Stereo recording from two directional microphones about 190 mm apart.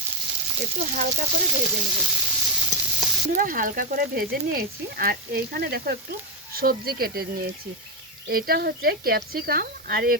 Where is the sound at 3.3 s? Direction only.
45° right (ahead or behind).